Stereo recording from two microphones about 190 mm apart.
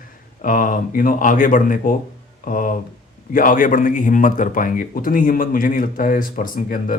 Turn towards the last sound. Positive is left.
turn(degrees=45)  # may be behind; listen again after turning